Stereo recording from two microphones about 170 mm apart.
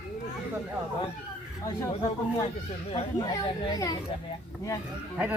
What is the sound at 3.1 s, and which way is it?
Speech, 20° left (ahead or behind).